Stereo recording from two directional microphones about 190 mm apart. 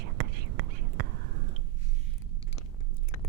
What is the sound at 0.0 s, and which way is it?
Whispering, 60° right (ahead or behind).